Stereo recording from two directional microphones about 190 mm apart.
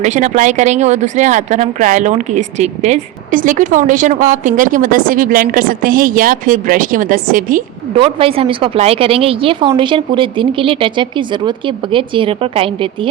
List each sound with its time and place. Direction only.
0.0 s speech: 40° right (ahead or behind)
7.9 s speech: 30° right (ahead or behind)